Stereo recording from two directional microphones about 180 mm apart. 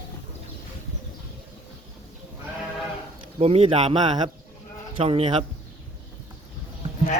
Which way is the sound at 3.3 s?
35° right (ahead or behind).